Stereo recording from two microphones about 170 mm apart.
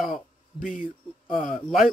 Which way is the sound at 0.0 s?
Centre (ahead or behind).